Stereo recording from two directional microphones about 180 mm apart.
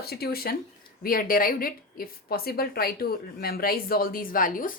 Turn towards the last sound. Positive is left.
turn(degrees=50)  # may be behind; listen again after turning